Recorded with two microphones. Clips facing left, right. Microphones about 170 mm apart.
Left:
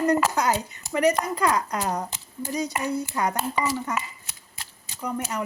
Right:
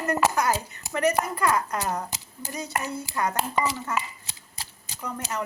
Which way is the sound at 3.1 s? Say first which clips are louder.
Left 2 dB; 15° left (ahead or behind).